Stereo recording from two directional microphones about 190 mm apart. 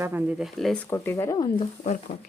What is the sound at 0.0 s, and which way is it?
Speech, 10° right (ahead or behind).